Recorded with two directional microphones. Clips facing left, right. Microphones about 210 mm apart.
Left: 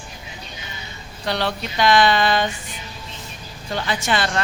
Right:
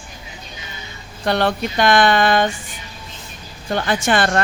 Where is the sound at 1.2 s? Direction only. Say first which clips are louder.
Right 5 dB; 50° right (ahead or behind).